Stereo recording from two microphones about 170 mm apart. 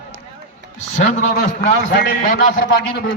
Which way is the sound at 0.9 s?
45° left (ahead or behind).